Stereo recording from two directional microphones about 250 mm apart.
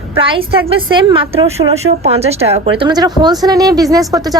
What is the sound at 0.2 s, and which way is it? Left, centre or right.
A woman's voice, right.